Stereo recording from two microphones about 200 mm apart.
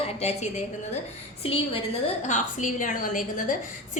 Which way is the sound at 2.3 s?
40° left (ahead or behind).